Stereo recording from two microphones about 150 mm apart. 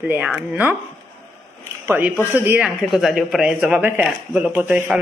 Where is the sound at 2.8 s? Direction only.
Centre (ahead or behind).